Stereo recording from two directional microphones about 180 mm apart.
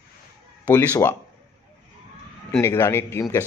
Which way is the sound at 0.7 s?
15° left (ahead or behind).